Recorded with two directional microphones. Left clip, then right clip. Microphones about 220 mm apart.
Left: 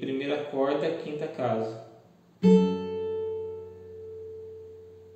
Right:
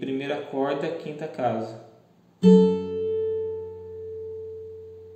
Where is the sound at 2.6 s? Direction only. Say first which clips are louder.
Right 6 dB; 55° right (ahead or behind).